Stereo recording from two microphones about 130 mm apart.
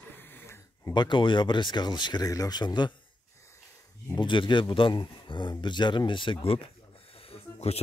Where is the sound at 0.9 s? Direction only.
35° left (ahead or behind).